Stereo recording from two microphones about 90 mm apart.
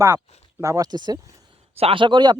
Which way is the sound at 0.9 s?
50° right (ahead or behind).